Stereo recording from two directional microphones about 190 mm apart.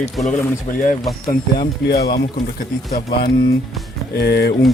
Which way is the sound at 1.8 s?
60° left (ahead or behind).